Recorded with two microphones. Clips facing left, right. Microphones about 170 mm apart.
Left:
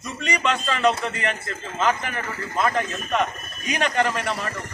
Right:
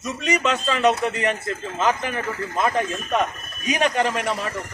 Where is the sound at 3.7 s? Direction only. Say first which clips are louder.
Right 2 dB; 15° right (ahead or behind).